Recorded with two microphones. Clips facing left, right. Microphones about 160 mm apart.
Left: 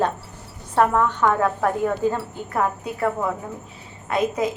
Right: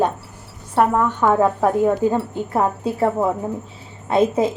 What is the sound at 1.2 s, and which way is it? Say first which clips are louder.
A woman's voice: right 4 dB; 20° right (ahead or behind).